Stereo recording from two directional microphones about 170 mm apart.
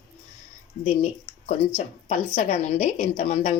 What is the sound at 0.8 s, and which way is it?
A woman's voice, 45° left (ahead or behind).